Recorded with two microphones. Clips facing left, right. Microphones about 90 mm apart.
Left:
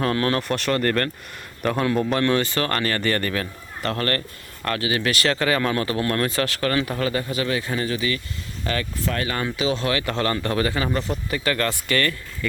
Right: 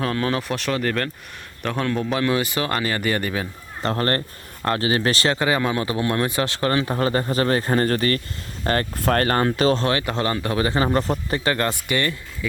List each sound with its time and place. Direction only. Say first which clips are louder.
0.0 s speech: left 1 dB; centre (ahead or behind)
3.8 s speech: right 2 dB; 30° right (ahead or behind)
10.1 s speech: even; 20° right (ahead or behind)
10.8 s speech: right 4 dB; 35° right (ahead or behind); by 12.1 s 20° right (ahead or behind)